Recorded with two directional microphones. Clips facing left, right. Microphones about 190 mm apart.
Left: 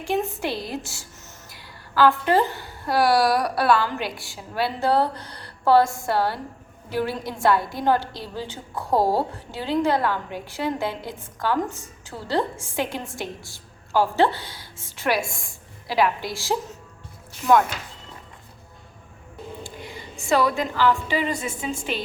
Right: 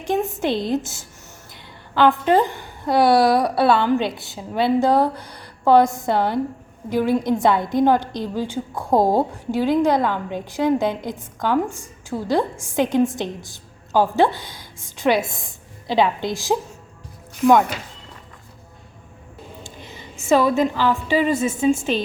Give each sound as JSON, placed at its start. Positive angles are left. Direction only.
{"t": 0.1, "sound": "a woman's voice", "side_deg": -20}
{"t": 20.2, "sound": "a woman's voice", "side_deg": -20}